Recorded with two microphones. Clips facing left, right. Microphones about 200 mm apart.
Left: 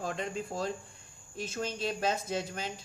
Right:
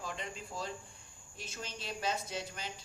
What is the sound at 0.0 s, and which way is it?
Speech, 50° left (ahead or behind).